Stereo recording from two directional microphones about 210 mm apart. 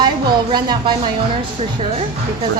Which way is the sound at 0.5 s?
20° right (ahead or behind).